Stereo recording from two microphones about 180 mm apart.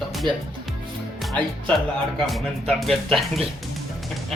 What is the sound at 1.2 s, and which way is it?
Music, centre (ahead or behind).